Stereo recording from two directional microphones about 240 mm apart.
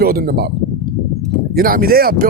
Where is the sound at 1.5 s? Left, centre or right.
Right.